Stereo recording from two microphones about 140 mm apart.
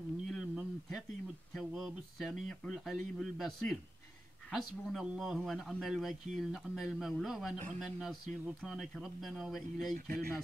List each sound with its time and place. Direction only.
0.3 s a sound: centre (ahead or behind)
1.5 s a man's voice: centre (ahead or behind)
9.9 s speech: 90° right